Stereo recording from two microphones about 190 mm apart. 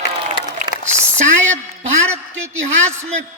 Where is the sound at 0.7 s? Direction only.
25° right (ahead or behind).